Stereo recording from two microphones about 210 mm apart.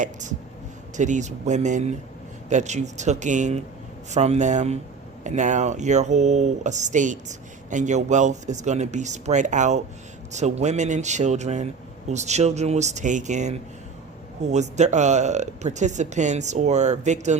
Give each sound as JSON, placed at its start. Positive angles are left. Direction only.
{"t": 0.0, "sound": "speech", "side_deg": -35}